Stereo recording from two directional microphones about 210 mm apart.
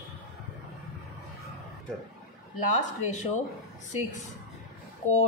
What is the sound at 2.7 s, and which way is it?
Speech, 35° left (ahead or behind).